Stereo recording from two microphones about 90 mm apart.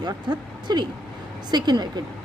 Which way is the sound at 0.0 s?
55° right (ahead or behind).